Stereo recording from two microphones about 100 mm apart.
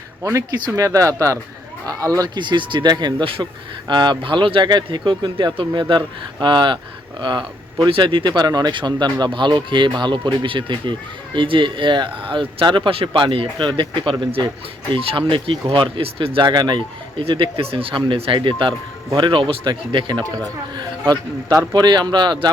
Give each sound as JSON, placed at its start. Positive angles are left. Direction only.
{"t": 0.2, "sound": "speech", "side_deg": -30}
{"t": 16.5, "sound": "speech", "side_deg": -45}
{"t": 20.3, "sound": "speech", "side_deg": -40}